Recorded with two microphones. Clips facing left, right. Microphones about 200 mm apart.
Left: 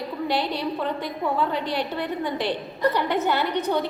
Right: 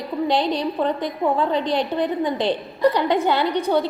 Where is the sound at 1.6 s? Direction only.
20° right (ahead or behind).